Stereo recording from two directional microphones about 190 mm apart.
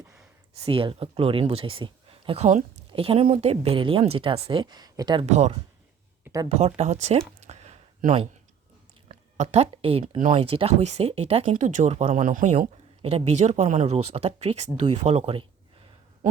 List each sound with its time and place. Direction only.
0.6 s speech: 30° right (ahead or behind)
5.2 s speech: 35° right (ahead or behind)
6.2 s a sound: 15° right (ahead or behind)
6.6 s speech: 35° right (ahead or behind)
7.4 s a sound: 35° right (ahead or behind)
10.2 s speech: 40° right (ahead or behind)